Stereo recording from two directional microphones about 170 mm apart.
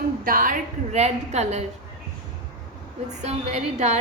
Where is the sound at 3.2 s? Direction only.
40° right (ahead or behind).